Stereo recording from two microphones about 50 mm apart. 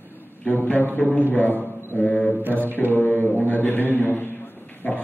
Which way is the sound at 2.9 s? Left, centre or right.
Left.